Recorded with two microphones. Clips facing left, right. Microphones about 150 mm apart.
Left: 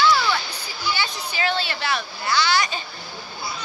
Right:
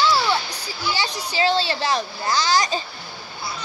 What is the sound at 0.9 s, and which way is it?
A child's voice, 35° right (ahead or behind).